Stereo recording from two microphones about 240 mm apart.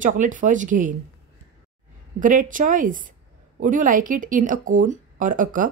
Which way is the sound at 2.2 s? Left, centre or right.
Right.